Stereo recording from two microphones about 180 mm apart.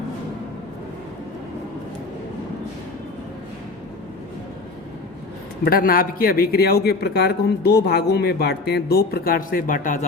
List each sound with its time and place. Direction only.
5.6 s a man's voice: 55° left (ahead or behind)